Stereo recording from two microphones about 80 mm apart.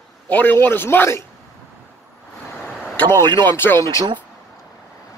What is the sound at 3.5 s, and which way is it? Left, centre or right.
Speech, left.